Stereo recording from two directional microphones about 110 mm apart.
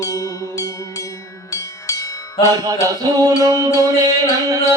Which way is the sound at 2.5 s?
35° right (ahead or behind).